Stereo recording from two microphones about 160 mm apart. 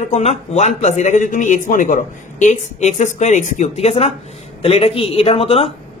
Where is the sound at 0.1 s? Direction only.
40° left (ahead or behind).